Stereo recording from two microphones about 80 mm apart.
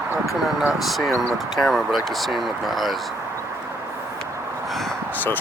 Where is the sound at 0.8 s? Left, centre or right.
Centre.